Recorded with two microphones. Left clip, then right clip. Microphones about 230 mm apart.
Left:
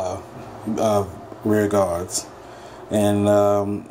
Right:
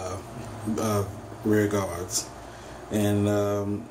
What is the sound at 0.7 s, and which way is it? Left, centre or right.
Speech, centre.